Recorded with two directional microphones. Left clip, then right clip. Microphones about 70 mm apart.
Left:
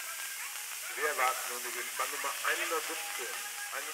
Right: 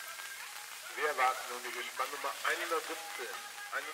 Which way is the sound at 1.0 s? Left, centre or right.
Right.